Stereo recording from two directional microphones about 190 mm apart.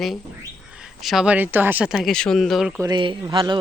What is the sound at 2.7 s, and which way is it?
Speech, 20° right (ahead or behind).